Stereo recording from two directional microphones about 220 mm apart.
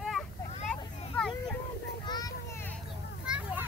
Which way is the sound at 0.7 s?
5° left (ahead or behind).